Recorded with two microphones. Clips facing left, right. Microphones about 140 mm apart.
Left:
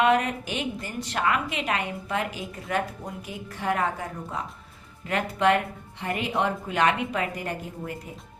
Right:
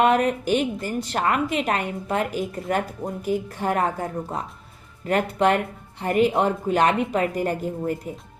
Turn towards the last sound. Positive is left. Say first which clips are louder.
# right 8 dB
turn(degrees=-40)  # may be behind; listen again after turning